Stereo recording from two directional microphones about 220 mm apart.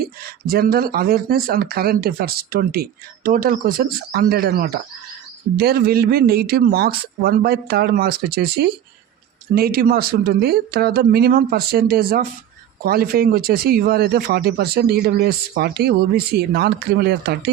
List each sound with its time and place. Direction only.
0.0 s speech: 45° right (ahead or behind)